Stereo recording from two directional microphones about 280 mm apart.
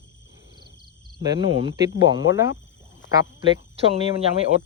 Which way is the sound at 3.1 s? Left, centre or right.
Centre.